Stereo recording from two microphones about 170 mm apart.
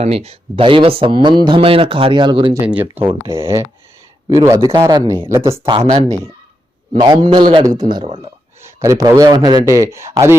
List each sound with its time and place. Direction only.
0.0 s speech: 35° right (ahead or behind)
2.5 s a man's voice: 10° right (ahead or behind)
5.6 s a man's voice: 25° right (ahead or behind)
8.2 s a man's voice: 20° right (ahead or behind)